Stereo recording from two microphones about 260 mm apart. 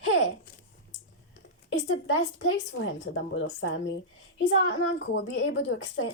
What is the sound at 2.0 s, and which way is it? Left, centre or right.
Speech, left.